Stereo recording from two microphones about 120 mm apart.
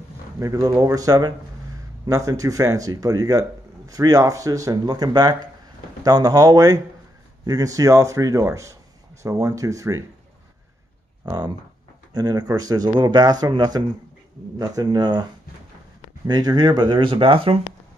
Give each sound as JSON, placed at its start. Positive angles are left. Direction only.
{"t": 0.4, "sound": "speech", "side_deg": -30}
{"t": 11.2, "sound": "speech", "side_deg": -35}
{"t": 16.3, "sound": "speech", "side_deg": -35}